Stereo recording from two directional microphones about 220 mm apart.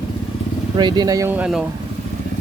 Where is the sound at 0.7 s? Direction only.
20° right (ahead or behind); by 1.6 s 5° right (ahead or behind).